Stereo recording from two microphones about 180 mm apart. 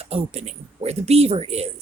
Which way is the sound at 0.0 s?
35° right (ahead or behind).